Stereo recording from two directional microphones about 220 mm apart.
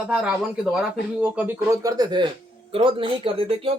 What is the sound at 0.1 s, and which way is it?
Speech, 5° right (ahead or behind).